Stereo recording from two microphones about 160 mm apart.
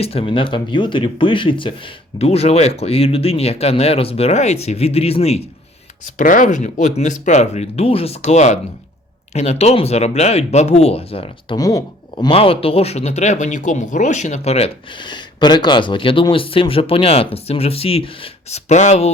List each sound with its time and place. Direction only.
0.0 s speech: 40° left (ahead or behind)
6.1 s speech: 55° left (ahead or behind); by 11.5 s 35° left (ahead or behind)
11.5 s speech: 25° left (ahead or behind); by 19.1 s 45° left (ahead or behind)